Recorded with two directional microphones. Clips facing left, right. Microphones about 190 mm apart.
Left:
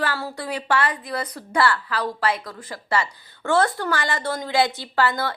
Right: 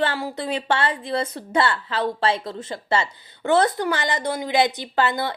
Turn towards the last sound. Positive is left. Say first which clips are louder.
# even
turn(degrees=-20)  # may be behind; listen again after turning